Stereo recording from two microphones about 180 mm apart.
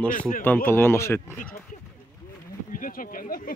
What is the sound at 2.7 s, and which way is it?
Speech, 50° left (ahead or behind).